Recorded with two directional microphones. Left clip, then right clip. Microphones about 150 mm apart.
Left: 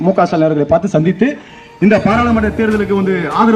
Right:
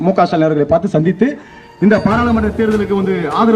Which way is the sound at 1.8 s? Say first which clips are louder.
Left 1 dB; 25° left (ahead or behind).